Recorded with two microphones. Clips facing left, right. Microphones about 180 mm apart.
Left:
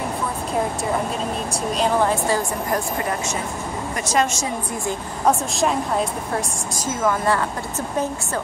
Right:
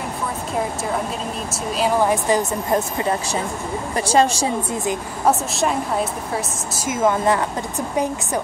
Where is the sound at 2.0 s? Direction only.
20° right (ahead or behind).